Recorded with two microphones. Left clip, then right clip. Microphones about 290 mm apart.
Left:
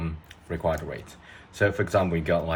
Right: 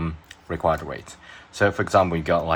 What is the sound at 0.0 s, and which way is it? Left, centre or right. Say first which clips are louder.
Speech: right 5 dB; centre.